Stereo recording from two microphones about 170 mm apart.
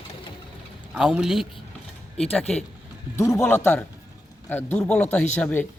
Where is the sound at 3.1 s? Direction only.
15° left (ahead or behind).